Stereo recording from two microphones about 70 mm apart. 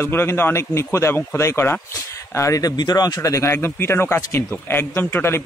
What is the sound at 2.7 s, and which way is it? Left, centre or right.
Speech, left.